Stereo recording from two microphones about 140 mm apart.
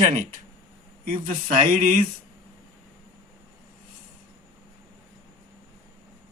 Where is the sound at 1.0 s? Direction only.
80° right.